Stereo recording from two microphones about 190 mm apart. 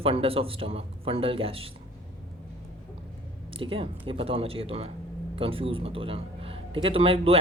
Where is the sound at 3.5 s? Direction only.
30° right (ahead or behind).